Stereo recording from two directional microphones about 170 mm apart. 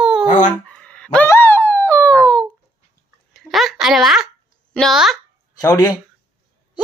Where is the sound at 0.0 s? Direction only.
Centre (ahead or behind).